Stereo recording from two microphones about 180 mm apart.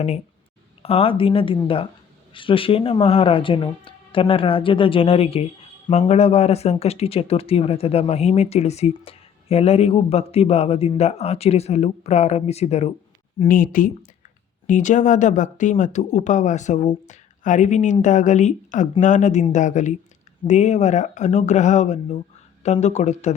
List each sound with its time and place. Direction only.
0.8 s speech: 35° left (ahead or behind)
13.4 s speech: 50° left (ahead or behind)